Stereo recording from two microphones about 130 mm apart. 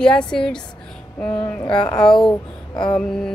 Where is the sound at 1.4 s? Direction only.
35° left (ahead or behind).